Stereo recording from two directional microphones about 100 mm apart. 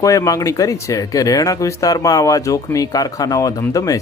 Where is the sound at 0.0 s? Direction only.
35° left (ahead or behind).